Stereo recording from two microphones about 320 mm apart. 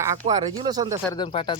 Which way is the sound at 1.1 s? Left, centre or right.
Centre.